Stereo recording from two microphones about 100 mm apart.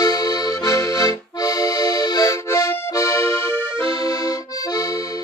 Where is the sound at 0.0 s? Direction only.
40° left (ahead or behind); by 3.8 s 20° left (ahead or behind).